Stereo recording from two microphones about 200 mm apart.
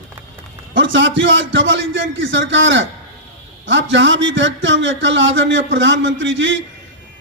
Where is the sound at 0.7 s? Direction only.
70° right (ahead or behind).